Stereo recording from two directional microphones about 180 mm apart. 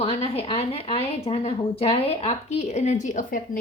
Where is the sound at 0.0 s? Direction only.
35° left (ahead or behind).